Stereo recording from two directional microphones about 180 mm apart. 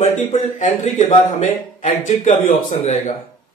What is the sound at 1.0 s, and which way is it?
A man's voice, 45° left (ahead or behind).